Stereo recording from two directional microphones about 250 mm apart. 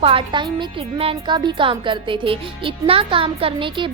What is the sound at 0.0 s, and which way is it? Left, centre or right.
A woman's voice, right.